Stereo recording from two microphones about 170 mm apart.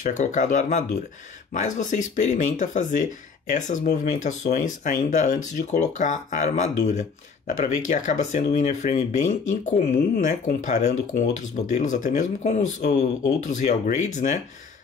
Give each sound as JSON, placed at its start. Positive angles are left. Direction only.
{"t": 0.0, "sound": "speech", "side_deg": 45}